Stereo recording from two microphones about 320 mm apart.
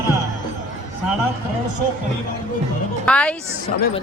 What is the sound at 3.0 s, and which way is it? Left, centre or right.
Speech, centre.